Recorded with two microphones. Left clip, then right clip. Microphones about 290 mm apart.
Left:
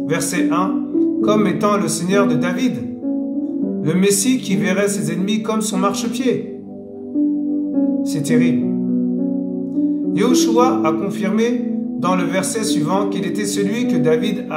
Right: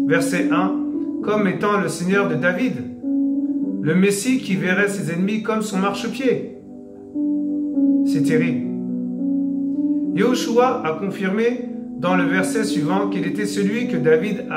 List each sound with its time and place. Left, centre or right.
1.2 s a man's voice: centre
3.8 s a man's voice: centre
8.1 s a man's voice: centre
10.1 s a man's voice: centre
13.7 s a man's voice: centre